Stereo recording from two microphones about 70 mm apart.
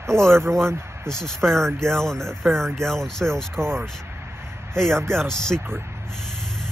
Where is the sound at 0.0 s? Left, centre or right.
Right.